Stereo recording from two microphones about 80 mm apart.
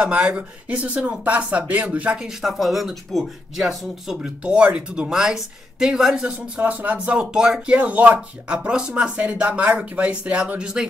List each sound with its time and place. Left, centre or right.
0.3 s speech: centre
2.4 s speech: centre
6.6 s speech: centre
7.7 s speech: centre